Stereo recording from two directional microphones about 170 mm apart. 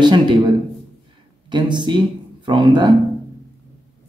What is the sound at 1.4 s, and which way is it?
Speech, 25° right (ahead or behind).